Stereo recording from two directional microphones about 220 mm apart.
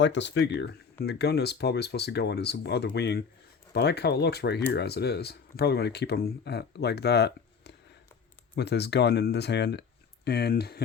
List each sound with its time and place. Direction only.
0.0 s speech: 55° left (ahead or behind)